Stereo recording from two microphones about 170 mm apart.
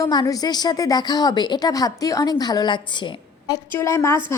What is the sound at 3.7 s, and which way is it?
Speech, 15° left (ahead or behind).